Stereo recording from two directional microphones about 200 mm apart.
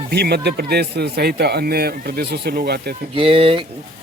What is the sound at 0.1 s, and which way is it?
A man's voice, 55° right (ahead or behind).